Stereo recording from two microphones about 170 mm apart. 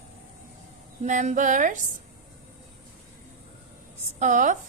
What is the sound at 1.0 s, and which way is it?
Speech, 45° right (ahead or behind).